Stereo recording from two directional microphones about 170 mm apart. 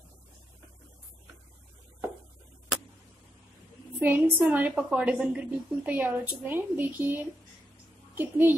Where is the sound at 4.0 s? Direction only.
10° right (ahead or behind).